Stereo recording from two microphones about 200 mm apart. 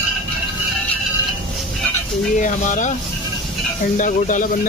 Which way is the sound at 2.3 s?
40° left (ahead or behind).